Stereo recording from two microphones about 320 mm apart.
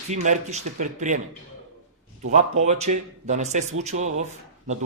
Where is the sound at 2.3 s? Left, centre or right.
Right.